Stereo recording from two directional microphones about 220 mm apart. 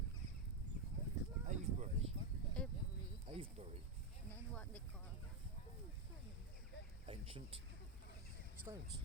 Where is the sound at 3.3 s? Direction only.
25° right (ahead or behind).